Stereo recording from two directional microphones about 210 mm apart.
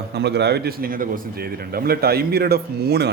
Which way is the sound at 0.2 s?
55° right (ahead or behind).